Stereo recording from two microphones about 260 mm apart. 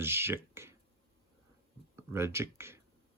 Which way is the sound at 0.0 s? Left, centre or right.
Centre.